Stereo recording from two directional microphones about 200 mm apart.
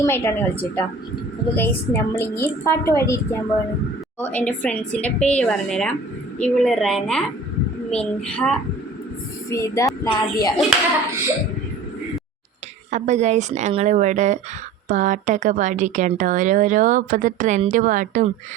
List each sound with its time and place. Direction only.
0.0 s a woman's voice: 10° left (ahead or behind)
4.2 s a woman's voice: 10° left (ahead or behind)
12.9 s speech: 35° right (ahead or behind)